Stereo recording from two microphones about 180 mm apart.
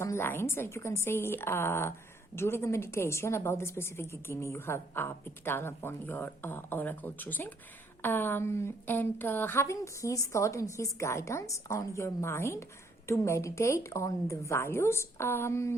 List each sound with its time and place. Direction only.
0.0 s a woman's voice: 15° left (ahead or behind)